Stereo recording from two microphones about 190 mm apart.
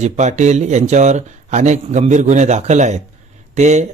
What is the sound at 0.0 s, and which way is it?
Speech, 40° right (ahead or behind).